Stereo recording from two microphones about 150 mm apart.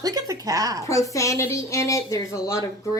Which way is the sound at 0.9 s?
20° left (ahead or behind).